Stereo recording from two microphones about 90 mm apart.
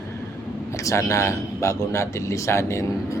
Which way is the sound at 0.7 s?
35° left (ahead or behind).